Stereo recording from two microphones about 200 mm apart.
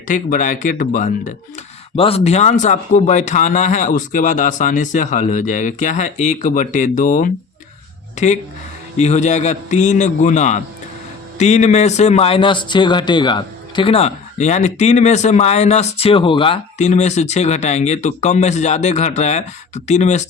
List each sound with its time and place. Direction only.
0.1 s speech: 40° left (ahead or behind)
2.0 s speech: 30° left (ahead or behind)